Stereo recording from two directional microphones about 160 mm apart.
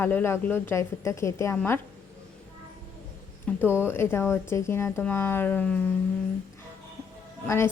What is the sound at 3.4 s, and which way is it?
A woman's voice, 15° left (ahead or behind).